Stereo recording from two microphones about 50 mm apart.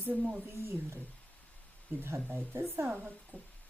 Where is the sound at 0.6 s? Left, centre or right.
Right.